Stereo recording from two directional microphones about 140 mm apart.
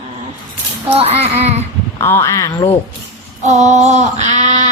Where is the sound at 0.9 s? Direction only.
45° right (ahead or behind).